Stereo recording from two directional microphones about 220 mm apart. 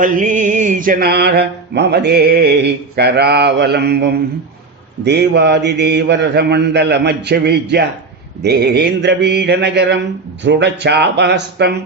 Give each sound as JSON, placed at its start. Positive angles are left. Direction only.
{"t": 0.0, "sound": "mantra", "side_deg": -35}